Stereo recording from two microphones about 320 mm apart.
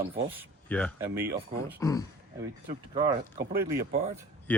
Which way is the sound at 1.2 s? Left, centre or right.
Right.